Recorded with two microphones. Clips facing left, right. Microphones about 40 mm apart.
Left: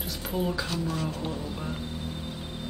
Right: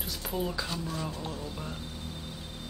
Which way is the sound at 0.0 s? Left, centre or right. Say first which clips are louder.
Left 3 dB; centre.